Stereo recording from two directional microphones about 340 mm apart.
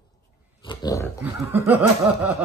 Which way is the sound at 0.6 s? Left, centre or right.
Centre.